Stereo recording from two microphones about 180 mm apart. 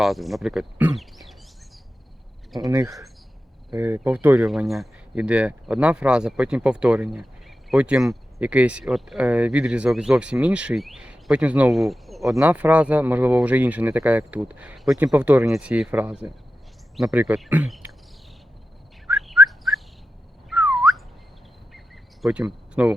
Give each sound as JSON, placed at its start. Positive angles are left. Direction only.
{"t": 0.0, "sound": "speech", "side_deg": 0}
{"t": 2.6, "sound": "speech", "side_deg": -20}
{"t": 12.3, "sound": "speech", "side_deg": -15}
{"t": 19.0, "sound": "bird", "side_deg": -5}
{"t": 20.5, "sound": "whistling", "side_deg": -5}
{"t": 22.2, "sound": "cricket", "side_deg": -5}